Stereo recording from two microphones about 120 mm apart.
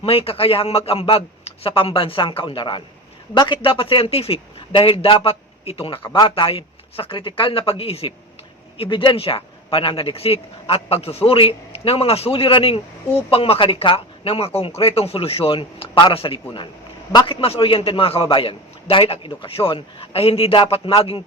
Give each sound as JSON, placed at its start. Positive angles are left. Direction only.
{"t": 0.0, "sound": "speech", "side_deg": 50}
{"t": 17.1, "sound": "a man's voice", "side_deg": 35}
{"t": 17.4, "sound": "speech", "side_deg": 50}